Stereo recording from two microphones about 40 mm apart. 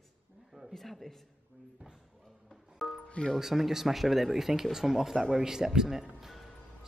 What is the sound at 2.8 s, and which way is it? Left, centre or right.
Music, centre.